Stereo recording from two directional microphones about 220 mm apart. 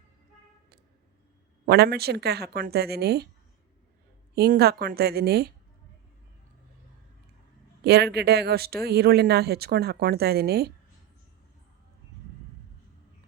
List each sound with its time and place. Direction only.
1.6 s speech: 45° right (ahead or behind)
4.4 s speech: 45° right (ahead or behind)
7.9 s speech: 45° right (ahead or behind)